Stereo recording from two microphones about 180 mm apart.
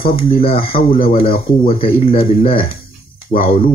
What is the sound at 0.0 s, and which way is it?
Speech, 30° left (ahead or behind).